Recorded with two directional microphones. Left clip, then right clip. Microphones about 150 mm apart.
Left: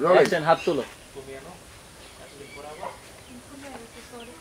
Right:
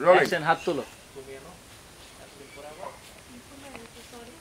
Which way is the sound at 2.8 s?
20° left (ahead or behind).